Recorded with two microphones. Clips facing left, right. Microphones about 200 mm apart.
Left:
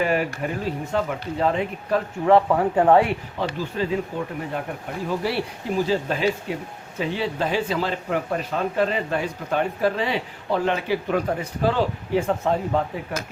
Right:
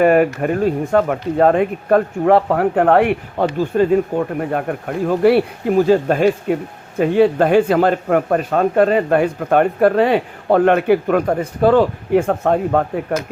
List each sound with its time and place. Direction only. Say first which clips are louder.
0.0 s speech: right 10 dB; 55° right (ahead or behind)